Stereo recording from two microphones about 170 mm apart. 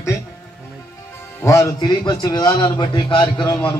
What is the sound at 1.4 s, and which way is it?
A man's voice, 20° left (ahead or behind).